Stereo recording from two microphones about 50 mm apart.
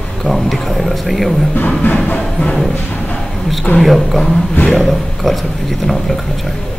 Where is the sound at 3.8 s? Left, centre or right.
Centre.